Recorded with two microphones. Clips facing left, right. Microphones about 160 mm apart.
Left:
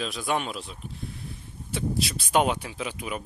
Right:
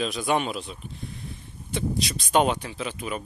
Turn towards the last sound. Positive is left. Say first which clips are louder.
# right 1 dB
turn(degrees=10)  # may be behind; listen again after turning